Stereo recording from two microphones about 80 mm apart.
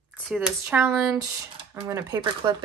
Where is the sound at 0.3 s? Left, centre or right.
Centre.